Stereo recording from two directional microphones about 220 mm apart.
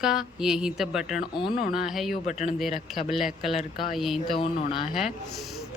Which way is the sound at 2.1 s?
35° left (ahead or behind).